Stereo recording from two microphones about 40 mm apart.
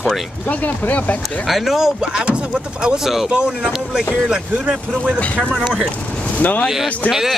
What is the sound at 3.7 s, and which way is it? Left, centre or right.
Speech, centre.